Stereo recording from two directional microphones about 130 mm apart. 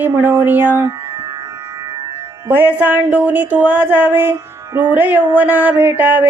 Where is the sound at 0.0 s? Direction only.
15° right (ahead or behind).